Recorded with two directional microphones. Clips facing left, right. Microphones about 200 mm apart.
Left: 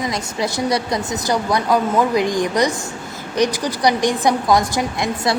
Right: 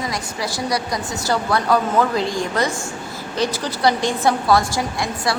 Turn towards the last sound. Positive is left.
turn(degrees=20)  # may be behind; listen again after turning